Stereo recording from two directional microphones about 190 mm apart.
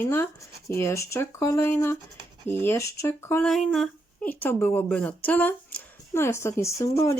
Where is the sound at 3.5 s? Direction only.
Centre (ahead or behind).